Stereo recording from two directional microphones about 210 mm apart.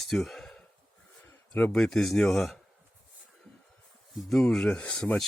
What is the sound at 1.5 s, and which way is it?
Speech, 5° left (ahead or behind).